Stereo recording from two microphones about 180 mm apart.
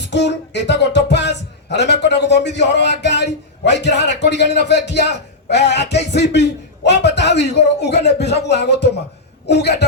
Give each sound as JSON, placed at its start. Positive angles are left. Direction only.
{"t": 0.0, "sound": "music", "side_deg": 70}